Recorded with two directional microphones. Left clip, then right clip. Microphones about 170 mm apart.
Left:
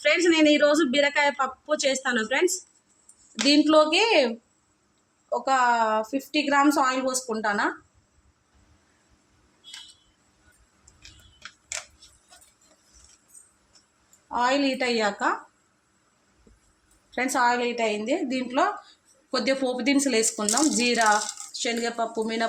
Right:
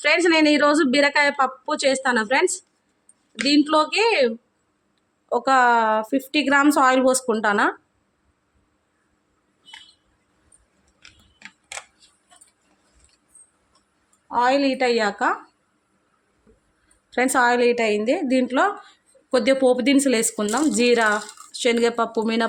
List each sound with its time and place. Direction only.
0.0 s a woman's voice: 50° right (ahead or behind)
5.3 s a woman's voice: 75° right (ahead or behind)
14.3 s a woman's voice: 50° right (ahead or behind)
17.1 s speech: 60° right (ahead or behind)